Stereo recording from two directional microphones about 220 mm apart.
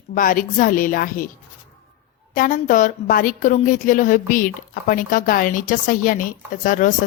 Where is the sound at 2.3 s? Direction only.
40° left (ahead or behind).